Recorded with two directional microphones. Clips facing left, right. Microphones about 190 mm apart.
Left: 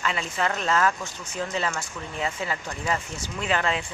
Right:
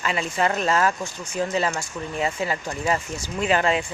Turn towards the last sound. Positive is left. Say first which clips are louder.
# right 5 dB
turn(degrees=-10)  # may be behind; listen again after turning